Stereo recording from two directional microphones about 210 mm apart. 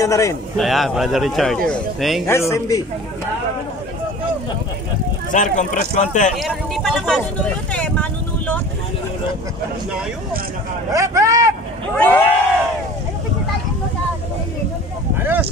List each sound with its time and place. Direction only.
0.0 s a man's voice: 15° left (ahead or behind)
0.6 s speech: centre (ahead or behind)
2.2 s a man's voice: 15° left (ahead or behind)
5.3 s speech: 35° left (ahead or behind)
6.3 s speech: centre (ahead or behind)
7.7 s vehicle: 5° left (ahead or behind)
10.9 s speech: 15° right (ahead or behind)
12.0 s speech: 10° left (ahead or behind)
15.1 s a sound: 10° right (ahead or behind)